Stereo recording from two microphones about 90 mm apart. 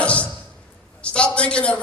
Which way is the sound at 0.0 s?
15° left (ahead or behind).